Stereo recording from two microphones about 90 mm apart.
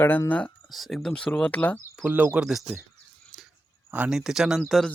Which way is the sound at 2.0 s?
15° right (ahead or behind).